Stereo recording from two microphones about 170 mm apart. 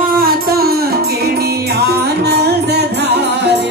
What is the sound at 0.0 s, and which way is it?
Music, 60° right (ahead or behind).